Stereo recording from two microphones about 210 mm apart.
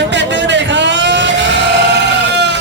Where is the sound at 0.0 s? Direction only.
55° right (ahead or behind).